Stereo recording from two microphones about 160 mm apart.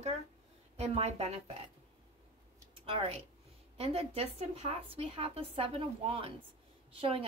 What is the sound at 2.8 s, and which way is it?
A woman's voice, 35° right (ahead or behind).